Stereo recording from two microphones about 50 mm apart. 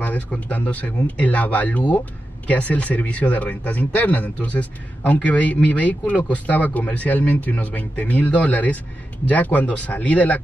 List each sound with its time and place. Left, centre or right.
0.0 s a man's voice: left